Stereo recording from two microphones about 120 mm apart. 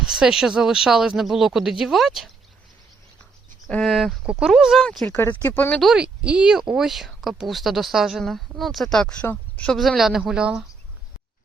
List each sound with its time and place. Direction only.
0.0 s speech: 5° right (ahead or behind)
3.7 s speech: centre (ahead or behind)
5.0 s speech: 20° left (ahead or behind)
5.8 s speech: 5° right (ahead or behind); by 9.7 s 10° left (ahead or behind)
9.7 s speech: centre (ahead or behind)